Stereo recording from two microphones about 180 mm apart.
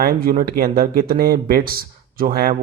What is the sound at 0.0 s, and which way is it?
Speech, 55° right (ahead or behind).